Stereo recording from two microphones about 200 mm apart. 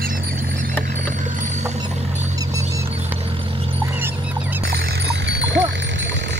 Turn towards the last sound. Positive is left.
turn(degrees=-65)  # may be behind; listen again after turning